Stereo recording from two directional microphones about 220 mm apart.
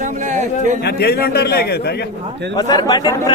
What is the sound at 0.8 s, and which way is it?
Speech, 45° left (ahead or behind).